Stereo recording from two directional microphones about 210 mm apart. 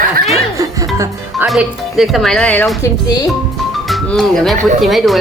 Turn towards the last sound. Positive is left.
turn(degrees=0)  # may be behind; listen again after turning